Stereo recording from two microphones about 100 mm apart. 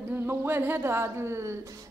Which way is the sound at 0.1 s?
25° right (ahead or behind).